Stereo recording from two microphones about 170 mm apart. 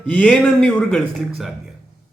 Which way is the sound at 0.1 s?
5° left (ahead or behind).